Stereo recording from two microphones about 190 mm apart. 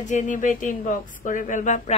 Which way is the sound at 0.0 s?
40° left (ahead or behind).